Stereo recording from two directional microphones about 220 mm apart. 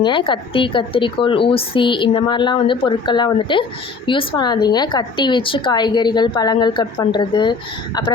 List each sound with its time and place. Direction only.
0.0 s speech: 20° left (ahead or behind)